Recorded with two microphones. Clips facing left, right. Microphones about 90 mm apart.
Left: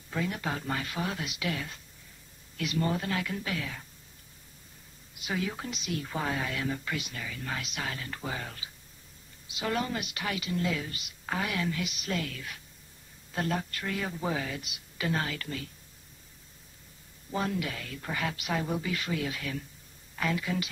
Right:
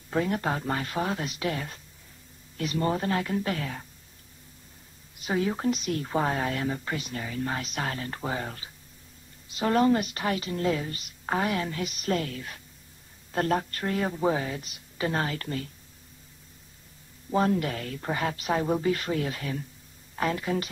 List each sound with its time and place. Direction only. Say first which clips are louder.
0.1 s a woman's voice: right 6 dB; 40° right (ahead or behind)
5.2 s a woman's voice: right 7 dB; 35° right (ahead or behind)
17.3 s a woman's voice: right 7 dB; 40° right (ahead or behind)